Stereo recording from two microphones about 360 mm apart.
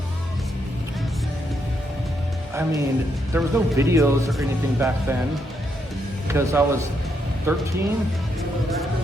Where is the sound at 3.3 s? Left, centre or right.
Centre.